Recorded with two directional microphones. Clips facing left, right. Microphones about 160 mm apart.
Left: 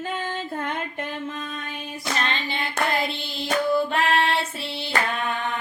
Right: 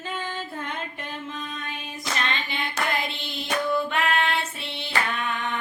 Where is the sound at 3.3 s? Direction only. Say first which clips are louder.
Left 3 dB; 35° left (ahead or behind).